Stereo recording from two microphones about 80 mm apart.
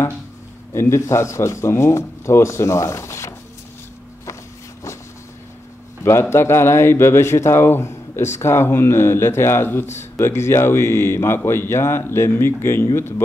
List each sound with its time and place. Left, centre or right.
0.7 s a man's voice: left
6.3 s a man's voice: left